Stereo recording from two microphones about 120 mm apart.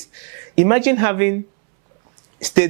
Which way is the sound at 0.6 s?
10° right (ahead or behind).